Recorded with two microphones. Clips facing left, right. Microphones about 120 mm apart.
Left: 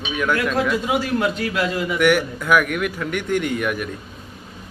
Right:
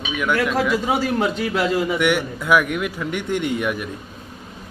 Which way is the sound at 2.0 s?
20° right (ahead or behind).